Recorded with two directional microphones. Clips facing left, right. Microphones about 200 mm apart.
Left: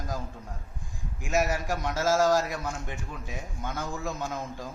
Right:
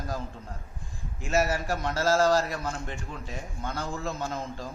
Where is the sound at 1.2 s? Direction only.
Centre (ahead or behind).